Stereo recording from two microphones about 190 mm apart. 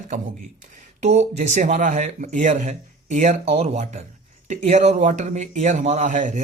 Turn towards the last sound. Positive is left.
turn(degrees=-40)  # may be behind; listen again after turning